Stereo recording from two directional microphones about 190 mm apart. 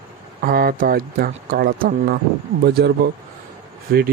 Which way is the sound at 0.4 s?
50° right (ahead or behind).